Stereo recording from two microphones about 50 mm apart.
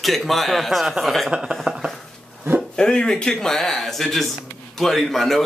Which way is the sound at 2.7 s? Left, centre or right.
Centre.